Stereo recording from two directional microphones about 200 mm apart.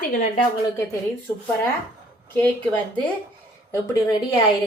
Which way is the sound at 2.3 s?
10° left (ahead or behind).